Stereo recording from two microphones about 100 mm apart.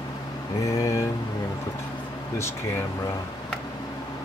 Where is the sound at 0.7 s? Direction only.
35° left (ahead or behind).